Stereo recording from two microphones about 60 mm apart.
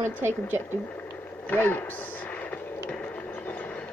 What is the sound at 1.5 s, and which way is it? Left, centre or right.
Speech, left.